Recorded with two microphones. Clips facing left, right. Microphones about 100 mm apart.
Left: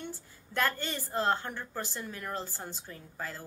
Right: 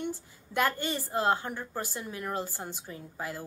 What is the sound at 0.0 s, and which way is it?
A woman's voice, 15° right (ahead or behind).